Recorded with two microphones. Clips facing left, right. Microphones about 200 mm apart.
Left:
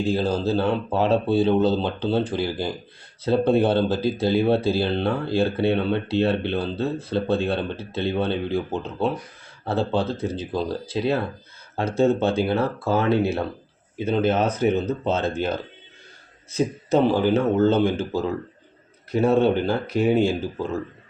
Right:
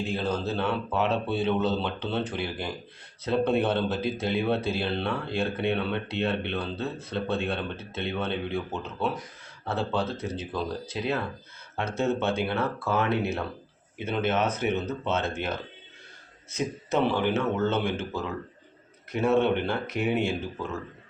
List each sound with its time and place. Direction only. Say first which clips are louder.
0.0 s speech: left 6 dB; 30° left (ahead or behind)